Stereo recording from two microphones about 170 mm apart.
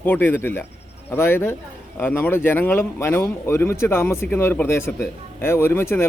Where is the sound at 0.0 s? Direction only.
10° left (ahead or behind).